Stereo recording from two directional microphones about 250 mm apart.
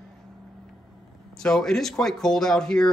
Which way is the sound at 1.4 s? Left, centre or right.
Centre.